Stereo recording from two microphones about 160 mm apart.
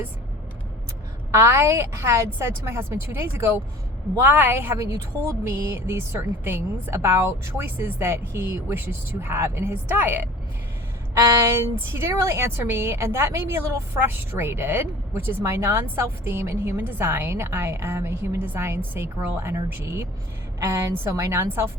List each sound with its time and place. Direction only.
1.3 s a woman's voice: 15° right (ahead or behind)